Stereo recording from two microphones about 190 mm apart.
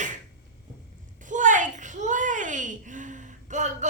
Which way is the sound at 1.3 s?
40° right (ahead or behind).